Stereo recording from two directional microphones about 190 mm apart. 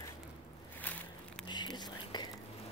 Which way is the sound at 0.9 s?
10° left (ahead or behind).